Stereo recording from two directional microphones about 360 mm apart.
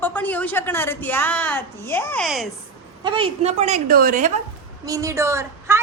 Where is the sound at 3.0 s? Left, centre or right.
Centre.